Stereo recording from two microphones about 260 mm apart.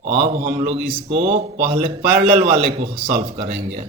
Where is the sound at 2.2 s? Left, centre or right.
Right.